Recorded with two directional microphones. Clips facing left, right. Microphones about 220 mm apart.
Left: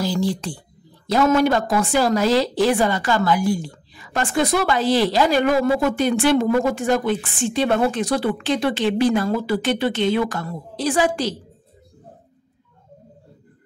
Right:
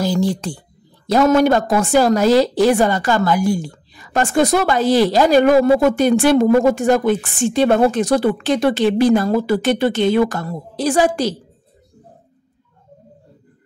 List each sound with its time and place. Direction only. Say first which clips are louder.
0.0 s a woman's voice: right 4 dB; 45° right (ahead or behind)